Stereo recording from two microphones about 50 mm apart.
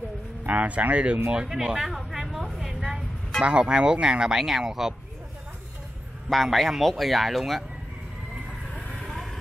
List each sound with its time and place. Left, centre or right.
0.5 s speech: right
1.3 s a sound: centre
3.4 s speech: centre
6.2 s speech: centre
8.7 s vehicle: centre